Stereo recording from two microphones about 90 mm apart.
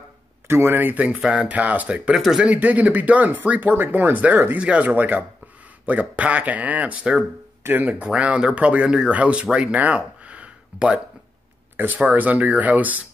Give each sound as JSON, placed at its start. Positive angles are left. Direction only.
{"t": 0.5, "sound": "speech", "side_deg": -30}
{"t": 2.1, "sound": "speech", "side_deg": 0}
{"t": 2.4, "sound": "speech", "side_deg": -15}